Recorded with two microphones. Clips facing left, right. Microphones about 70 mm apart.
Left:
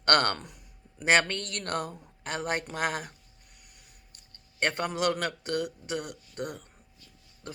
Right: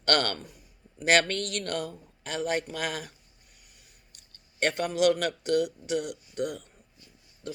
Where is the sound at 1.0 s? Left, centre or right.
Left.